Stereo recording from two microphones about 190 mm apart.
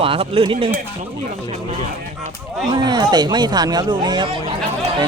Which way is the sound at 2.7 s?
20° right (ahead or behind).